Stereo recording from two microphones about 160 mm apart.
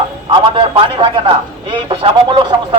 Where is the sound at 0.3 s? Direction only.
35° right (ahead or behind).